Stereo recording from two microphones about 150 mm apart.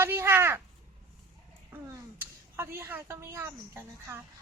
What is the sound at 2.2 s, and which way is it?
Speech, 15° right (ahead or behind).